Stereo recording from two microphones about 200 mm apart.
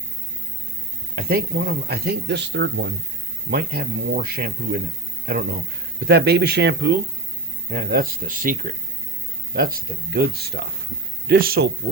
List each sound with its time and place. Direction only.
1.1 s speech: 50° right (ahead or behind)
3.5 s speech: 50° right (ahead or behind)